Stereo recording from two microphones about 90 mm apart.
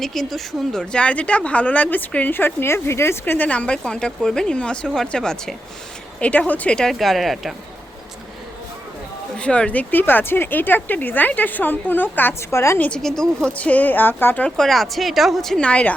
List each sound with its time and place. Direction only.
0.0 s speech: 5° left (ahead or behind)
9.4 s speech: 10° left (ahead or behind); by 12.8 s 30° left (ahead or behind)
13.0 s speech: 5° left (ahead or behind); by 14.4 s 20° left (ahead or behind)
14.4 s speech: 5° left (ahead or behind)